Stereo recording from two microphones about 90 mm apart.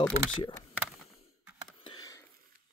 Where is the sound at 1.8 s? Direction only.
45° left (ahead or behind).